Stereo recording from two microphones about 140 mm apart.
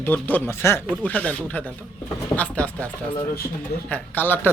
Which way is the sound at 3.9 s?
15° left (ahead or behind).